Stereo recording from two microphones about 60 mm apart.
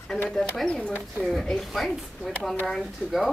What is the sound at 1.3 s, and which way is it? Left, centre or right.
A woman's voice, centre.